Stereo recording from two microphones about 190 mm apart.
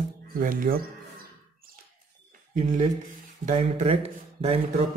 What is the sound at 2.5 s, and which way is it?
Speech, 40° right (ahead or behind).